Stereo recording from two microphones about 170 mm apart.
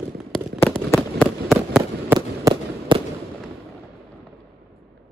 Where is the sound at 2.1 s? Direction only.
20° right (ahead or behind).